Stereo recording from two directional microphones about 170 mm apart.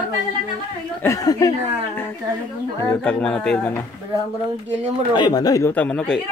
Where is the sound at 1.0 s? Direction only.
20° left (ahead or behind).